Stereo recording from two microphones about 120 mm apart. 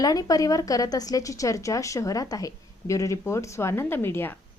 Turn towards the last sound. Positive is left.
turn(degrees=20)  # may be behind; listen again after turning